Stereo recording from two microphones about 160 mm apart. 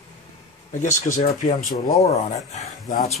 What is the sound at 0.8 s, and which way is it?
Speech, 55° left (ahead or behind).